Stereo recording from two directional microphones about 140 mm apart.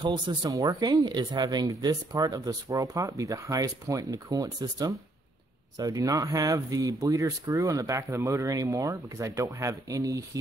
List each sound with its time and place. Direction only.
0.0 s speech: 30° right (ahead or behind)